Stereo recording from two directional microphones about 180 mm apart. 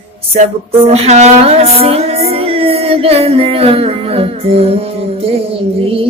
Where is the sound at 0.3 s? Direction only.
35° right (ahead or behind).